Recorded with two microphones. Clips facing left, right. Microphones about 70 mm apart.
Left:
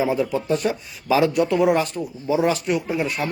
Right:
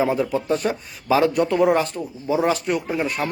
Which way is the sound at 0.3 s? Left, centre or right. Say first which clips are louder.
Even; right.